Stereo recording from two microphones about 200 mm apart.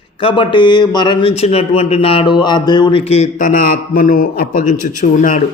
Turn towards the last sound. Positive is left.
turn(degrees=40)  # may be behind; listen again after turning